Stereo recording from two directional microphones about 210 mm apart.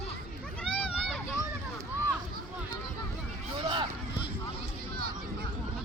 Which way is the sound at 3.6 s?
20° right (ahead or behind).